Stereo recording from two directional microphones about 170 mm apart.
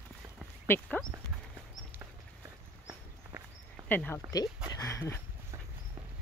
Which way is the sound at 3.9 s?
10° left (ahead or behind).